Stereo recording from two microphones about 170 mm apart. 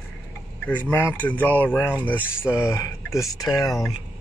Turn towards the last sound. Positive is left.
turn(degrees=20)  # may be behind; listen again after turning